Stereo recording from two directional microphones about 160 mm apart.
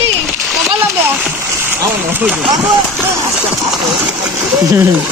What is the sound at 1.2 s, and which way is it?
Speech, 10° right (ahead or behind).